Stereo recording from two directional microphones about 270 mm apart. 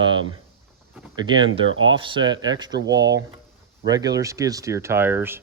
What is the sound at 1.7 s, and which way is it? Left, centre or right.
Speech, right.